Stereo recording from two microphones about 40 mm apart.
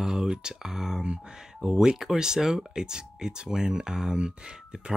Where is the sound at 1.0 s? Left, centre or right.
Right.